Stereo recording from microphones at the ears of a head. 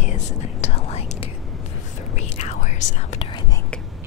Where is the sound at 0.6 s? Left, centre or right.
Left.